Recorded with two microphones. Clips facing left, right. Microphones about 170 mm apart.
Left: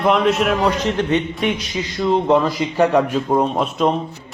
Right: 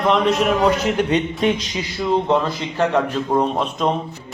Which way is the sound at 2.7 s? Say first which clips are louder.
Left 3 dB; 10° left (ahead or behind).